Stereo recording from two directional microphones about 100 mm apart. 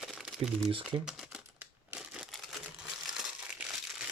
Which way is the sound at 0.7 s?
65° right (ahead or behind).